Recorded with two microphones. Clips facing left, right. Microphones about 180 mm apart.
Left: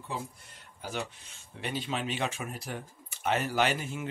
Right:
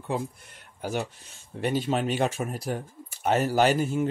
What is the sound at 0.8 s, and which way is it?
Speech, 45° right (ahead or behind).